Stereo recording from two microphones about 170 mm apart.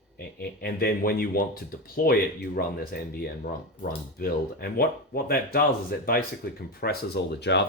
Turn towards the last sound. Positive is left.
turn(degrees=85)